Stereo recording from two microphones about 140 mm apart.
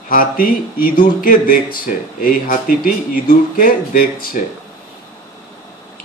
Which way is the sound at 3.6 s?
90° left.